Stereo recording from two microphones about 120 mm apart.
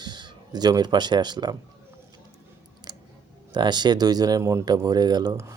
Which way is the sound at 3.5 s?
35° right (ahead or behind).